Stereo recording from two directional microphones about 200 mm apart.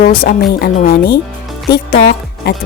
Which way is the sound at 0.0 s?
45° left (ahead or behind).